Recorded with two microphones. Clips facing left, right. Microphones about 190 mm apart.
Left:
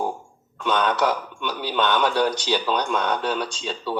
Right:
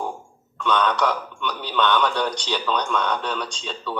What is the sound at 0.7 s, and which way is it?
Speech, 45° left (ahead or behind).